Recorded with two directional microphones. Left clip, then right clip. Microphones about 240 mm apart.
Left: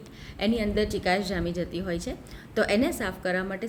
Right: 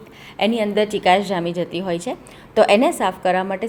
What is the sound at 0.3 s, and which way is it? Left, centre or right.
Speech, left.